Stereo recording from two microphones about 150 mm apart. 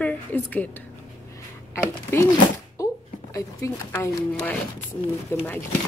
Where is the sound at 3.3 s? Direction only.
20° left (ahead or behind).